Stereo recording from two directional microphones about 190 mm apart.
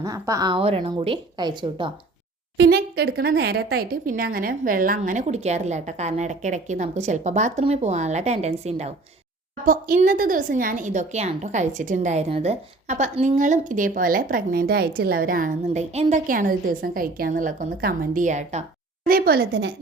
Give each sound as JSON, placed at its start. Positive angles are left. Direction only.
{"t": 0.0, "sound": "a woman's voice", "side_deg": -20}
{"t": 2.6, "sound": "speech", "side_deg": -60}
{"t": 9.6, "sound": "a woman's voice", "side_deg": -45}
{"t": 19.0, "sound": "speech", "side_deg": -50}